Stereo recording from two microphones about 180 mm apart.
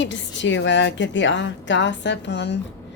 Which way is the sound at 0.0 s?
85° left.